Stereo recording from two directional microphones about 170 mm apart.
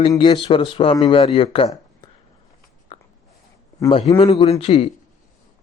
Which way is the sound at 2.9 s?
35° left (ahead or behind).